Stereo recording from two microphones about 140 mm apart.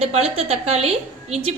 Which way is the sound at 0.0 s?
45° right (ahead or behind).